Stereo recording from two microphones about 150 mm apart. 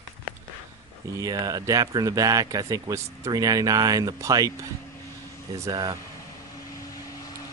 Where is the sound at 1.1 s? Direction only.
25° right (ahead or behind).